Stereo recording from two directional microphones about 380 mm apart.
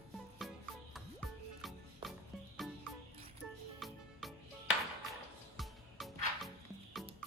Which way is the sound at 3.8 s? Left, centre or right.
Centre.